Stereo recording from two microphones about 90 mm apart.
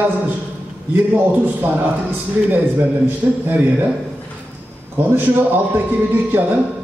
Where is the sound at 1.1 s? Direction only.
20° right (ahead or behind).